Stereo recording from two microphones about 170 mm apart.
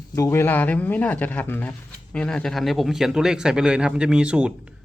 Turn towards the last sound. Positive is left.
turn(degrees=-5)  # may be behind; listen again after turning